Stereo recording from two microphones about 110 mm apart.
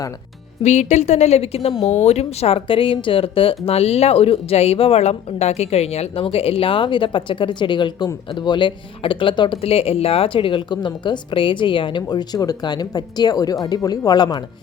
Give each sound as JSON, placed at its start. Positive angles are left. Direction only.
{"t": 0.6, "sound": "a woman's voice", "side_deg": 90}
{"t": 1.8, "sound": "speech", "side_deg": 90}